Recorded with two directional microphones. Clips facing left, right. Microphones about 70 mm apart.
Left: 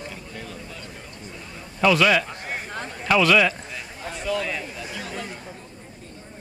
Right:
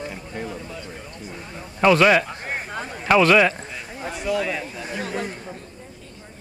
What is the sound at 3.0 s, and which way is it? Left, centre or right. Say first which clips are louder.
Speech: right 3 dB; right.